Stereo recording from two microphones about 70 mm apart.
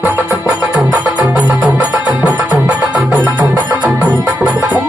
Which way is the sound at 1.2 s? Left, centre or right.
Centre.